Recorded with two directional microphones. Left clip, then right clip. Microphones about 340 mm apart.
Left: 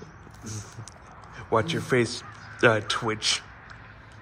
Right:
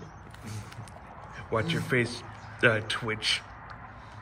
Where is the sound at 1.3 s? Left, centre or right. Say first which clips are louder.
Left 5 dB; centre.